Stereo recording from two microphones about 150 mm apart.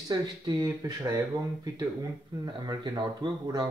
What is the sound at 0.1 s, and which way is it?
Speech, 25° right (ahead or behind).